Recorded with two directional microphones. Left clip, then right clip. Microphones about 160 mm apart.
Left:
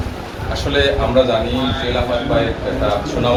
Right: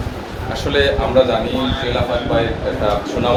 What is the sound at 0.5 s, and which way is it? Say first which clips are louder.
Speech: even; 5° right (ahead or behind).